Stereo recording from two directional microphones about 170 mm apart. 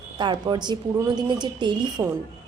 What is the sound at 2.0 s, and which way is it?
Speech, 10° right (ahead or behind).